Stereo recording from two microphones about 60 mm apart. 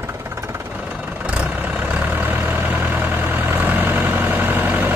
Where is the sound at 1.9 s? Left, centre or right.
Right.